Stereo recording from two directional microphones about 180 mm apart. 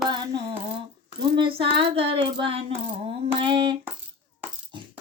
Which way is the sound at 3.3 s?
30° right (ahead or behind).